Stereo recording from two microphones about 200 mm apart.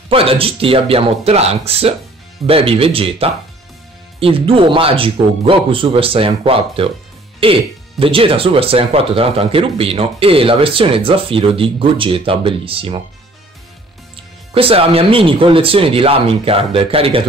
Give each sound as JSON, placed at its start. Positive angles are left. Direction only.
{"t": 0.1, "sound": "speech", "side_deg": -30}
{"t": 14.1, "sound": "speech", "side_deg": -30}